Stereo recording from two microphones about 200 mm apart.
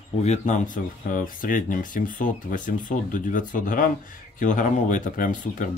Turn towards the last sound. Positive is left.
turn(degrees=40)  # may be behind; listen again after turning